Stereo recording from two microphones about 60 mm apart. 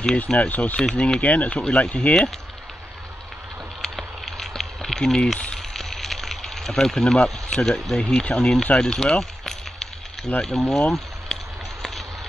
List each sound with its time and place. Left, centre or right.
0.3 s speech: left
0.8 s speech: centre
3.8 s a sound: centre
8.0 s speech: centre
8.7 s a sound: centre
10.4 s speech: centre